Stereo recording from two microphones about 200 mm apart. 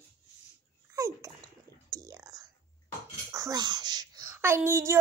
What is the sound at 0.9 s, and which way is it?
Dog, 15° right (ahead or behind).